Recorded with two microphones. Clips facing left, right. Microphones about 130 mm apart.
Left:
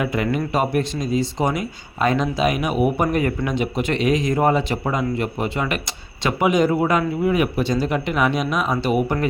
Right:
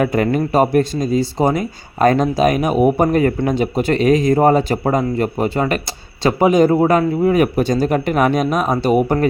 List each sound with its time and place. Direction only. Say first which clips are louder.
0.0 s speech: right 6 dB; 45° right (ahead or behind)